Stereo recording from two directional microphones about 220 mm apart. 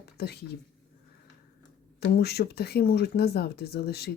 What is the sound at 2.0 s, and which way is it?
Speech, 45° left (ahead or behind).